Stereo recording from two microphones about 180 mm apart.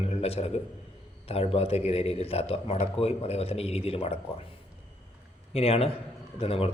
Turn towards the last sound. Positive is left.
turn(degrees=35)  # may be behind; listen again after turning